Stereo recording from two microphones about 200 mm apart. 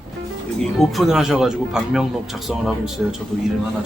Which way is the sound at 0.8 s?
Centre (ahead or behind).